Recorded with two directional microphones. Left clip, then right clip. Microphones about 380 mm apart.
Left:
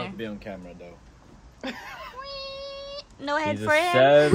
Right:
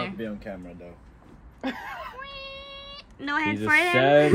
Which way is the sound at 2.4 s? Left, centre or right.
Left.